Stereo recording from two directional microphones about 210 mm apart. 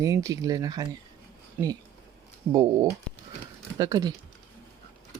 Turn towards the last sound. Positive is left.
turn(degrees=-20)  # may be behind; listen again after turning